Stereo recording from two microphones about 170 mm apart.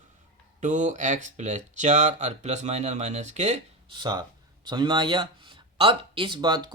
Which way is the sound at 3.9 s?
25° right (ahead or behind).